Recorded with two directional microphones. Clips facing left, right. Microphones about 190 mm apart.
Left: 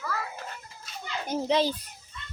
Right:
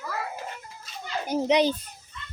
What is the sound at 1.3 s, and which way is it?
Speech, 20° right (ahead or behind).